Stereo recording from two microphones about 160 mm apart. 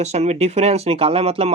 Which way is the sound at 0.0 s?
45° right (ahead or behind).